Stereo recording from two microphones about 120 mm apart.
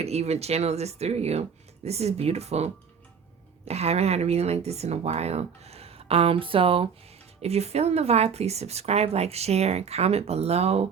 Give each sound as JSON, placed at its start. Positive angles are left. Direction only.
{"t": 0.0, "sound": "speech", "side_deg": -60}
{"t": 3.7, "sound": "speech", "side_deg": -60}
{"t": 7.4, "sound": "speech", "side_deg": -60}